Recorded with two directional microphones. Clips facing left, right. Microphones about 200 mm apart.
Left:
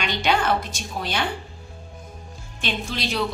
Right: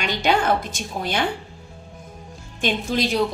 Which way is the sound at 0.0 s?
45° right (ahead or behind).